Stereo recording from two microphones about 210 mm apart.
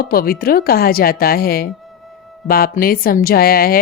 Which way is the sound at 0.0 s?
45° left (ahead or behind).